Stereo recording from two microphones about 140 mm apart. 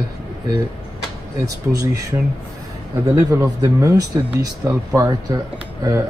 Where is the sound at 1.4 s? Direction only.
25° right (ahead or behind).